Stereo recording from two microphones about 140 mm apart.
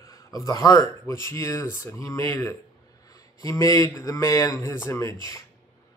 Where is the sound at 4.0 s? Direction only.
25° left (ahead or behind).